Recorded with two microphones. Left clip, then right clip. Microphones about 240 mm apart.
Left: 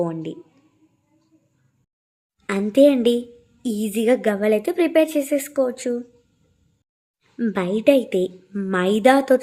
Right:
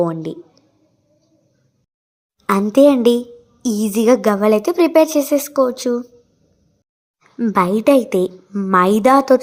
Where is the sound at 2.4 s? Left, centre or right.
Centre.